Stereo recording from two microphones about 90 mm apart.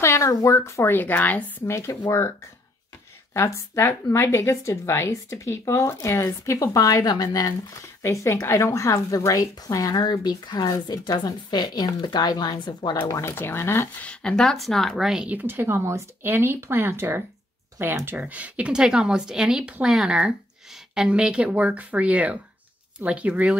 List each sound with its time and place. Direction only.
0.0 s speech: 35° left (ahead or behind)
0.9 s speech: 20° left (ahead or behind); by 2.3 s 35° left (ahead or behind)
3.3 s speech: 35° left (ahead or behind); by 12.5 s 50° left (ahead or behind)
12.6 s speech: 65° left (ahead or behind)
13.2 s speech: 25° left (ahead or behind)
14.0 s speech: 10° left (ahead or behind)
15.2 s speech: 20° right (ahead or behind)
18.2 s speech: 15° right (ahead or behind)